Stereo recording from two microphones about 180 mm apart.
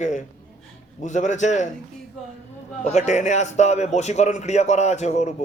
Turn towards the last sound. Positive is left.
turn(degrees=40)  # may be behind; listen again after turning